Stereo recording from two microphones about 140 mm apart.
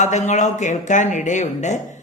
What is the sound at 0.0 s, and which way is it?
Speech, 55° left (ahead or behind).